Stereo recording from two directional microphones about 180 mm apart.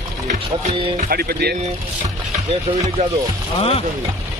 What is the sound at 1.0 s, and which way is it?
Speech, 60° right (ahead or behind).